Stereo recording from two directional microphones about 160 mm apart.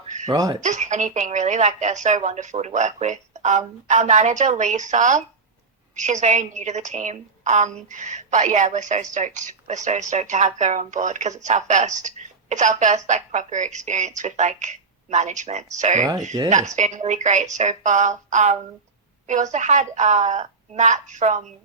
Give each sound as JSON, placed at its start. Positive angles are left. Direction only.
{"t": 0.3, "sound": "speech", "side_deg": -25}
{"t": 0.6, "sound": "a woman's voice", "side_deg": -50}